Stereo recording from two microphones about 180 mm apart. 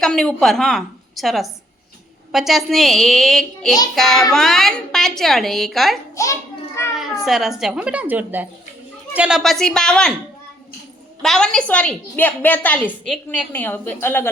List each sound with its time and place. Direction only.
0.0 s a woman's voice: 5° left (ahead or behind)
6.2 s a woman's voice: 15° left (ahead or behind)
6.9 s a woman's voice: centre (ahead or behind)
11.2 s a woman's voice: 5° left (ahead or behind)